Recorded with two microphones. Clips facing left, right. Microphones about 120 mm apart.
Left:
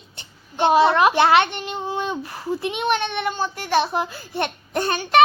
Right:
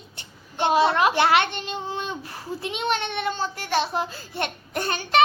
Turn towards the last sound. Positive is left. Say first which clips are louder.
# left 4 dB
turn(degrees=20)  # may be behind; listen again after turning